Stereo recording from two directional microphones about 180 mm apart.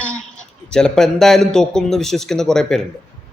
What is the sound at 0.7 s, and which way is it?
A man's voice, 5° left (ahead or behind).